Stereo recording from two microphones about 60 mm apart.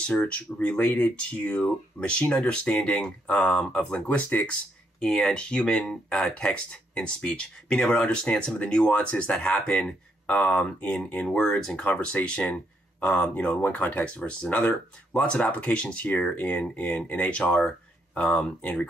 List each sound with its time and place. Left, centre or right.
0.0 s speech: centre
4.3 s speech: left
5.0 s speech: centre
11.2 s speech: centre